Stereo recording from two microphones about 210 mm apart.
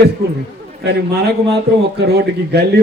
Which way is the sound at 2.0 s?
50° right (ahead or behind).